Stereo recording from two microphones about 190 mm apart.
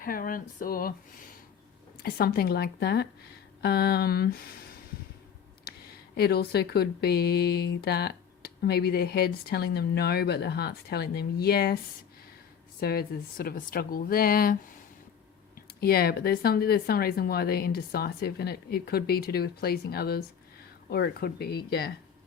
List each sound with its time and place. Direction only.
0.0 s speech: 50° left (ahead or behind)
2.0 s speech: 55° left (ahead or behind)
6.1 s speech: 55° left (ahead or behind)
12.8 s speech: 55° left (ahead or behind)
15.8 s speech: 55° left (ahead or behind)